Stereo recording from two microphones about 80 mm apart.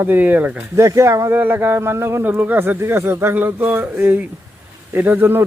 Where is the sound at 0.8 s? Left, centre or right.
Right.